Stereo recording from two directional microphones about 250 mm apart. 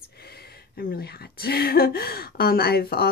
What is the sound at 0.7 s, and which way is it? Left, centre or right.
A woman's voice, left.